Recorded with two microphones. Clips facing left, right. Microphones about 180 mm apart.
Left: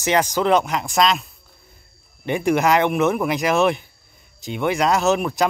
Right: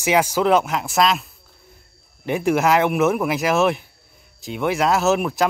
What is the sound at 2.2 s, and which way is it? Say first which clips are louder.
Speech: even; centre (ahead or behind).